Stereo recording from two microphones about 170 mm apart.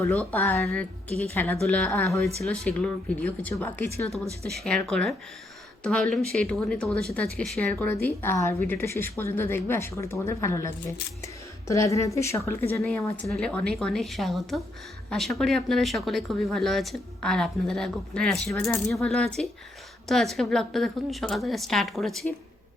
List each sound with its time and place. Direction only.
0.0 s speech: 10° left (ahead or behind)
2.2 s speech: 5° left (ahead or behind)
4.4 s speech: centre (ahead or behind)
11.7 s speech: 20° left (ahead or behind)
13.2 s speech: 5° left (ahead or behind)